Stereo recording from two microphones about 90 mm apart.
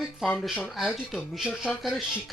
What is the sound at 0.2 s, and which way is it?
Speech, centre (ahead or behind).